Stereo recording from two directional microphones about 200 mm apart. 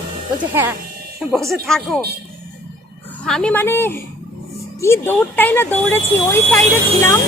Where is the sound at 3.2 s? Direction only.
5° left (ahead or behind).